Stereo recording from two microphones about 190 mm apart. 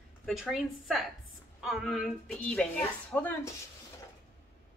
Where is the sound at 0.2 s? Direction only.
Centre (ahead or behind).